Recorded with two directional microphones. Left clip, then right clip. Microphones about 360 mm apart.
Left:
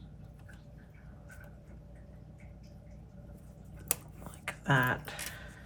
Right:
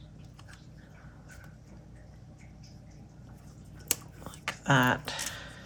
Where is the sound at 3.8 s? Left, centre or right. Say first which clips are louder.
Right 5 dB; centre.